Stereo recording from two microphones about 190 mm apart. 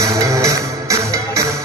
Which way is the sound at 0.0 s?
15° right (ahead or behind).